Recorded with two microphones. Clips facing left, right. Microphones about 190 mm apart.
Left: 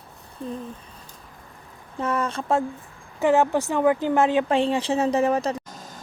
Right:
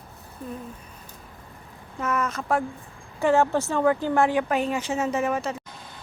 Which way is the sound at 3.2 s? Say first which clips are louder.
Left 1 dB; 15° left (ahead or behind).